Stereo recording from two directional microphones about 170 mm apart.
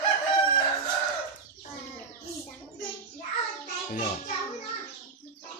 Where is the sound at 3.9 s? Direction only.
50° left (ahead or behind).